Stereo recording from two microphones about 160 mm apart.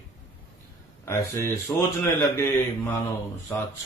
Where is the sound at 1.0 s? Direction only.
15° left (ahead or behind).